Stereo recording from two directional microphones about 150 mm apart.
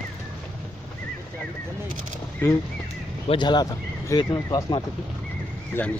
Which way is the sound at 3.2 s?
30° left (ahead or behind).